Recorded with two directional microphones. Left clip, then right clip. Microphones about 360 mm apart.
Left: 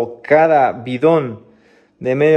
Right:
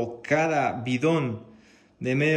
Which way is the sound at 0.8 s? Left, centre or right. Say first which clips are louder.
Left 11 dB; centre.